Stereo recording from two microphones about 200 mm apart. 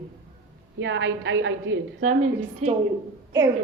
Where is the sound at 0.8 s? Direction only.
70° right (ahead or behind).